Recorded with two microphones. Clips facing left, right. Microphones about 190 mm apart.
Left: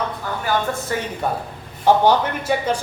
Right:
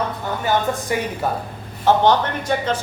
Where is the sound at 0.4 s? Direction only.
15° right (ahead or behind).